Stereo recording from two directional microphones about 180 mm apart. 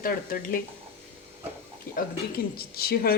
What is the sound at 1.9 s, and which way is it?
Speech, 60° left (ahead or behind).